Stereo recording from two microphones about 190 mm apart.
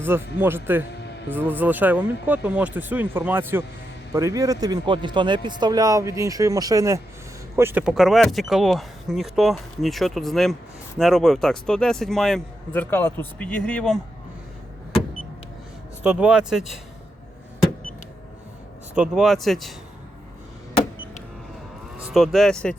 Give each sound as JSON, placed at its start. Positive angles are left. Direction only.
{"t": 0.0, "sound": "speech", "side_deg": -10}
{"t": 16.0, "sound": "speech", "side_deg": -5}
{"t": 18.9, "sound": "speech", "side_deg": -5}
{"t": 21.9, "sound": "speech", "side_deg": 0}